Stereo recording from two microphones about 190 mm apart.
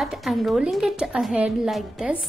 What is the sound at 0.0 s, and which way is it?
A woman's voice, centre (ahead or behind).